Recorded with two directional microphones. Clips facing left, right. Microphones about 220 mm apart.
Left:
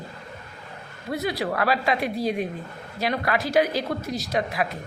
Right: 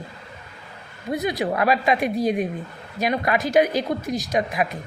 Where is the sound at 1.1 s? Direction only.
20° right (ahead or behind).